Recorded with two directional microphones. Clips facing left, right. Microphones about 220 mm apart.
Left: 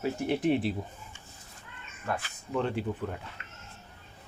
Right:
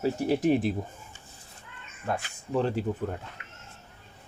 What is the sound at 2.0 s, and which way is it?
Speech, 35° right (ahead or behind).